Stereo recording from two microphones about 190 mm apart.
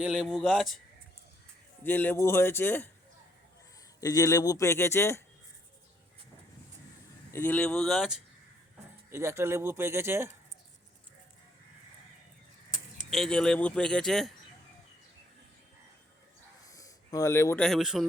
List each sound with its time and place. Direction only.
0.0 s speech: 5° right (ahead or behind)
1.8 s speech: 10° left (ahead or behind)
4.0 s speech: 20° left (ahead or behind)
7.3 s speech: 10° left (ahead or behind)
9.0 s speech: 15° right (ahead or behind)
13.1 s speech: centre (ahead or behind)
16.6 s a sound: 20° left (ahead or behind)
17.6 s speech: centre (ahead or behind)